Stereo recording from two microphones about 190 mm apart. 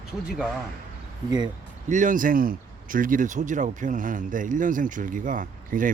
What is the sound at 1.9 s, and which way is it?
Speech, 40° right (ahead or behind).